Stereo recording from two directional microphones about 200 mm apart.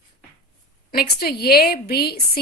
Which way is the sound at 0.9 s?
50° left (ahead or behind).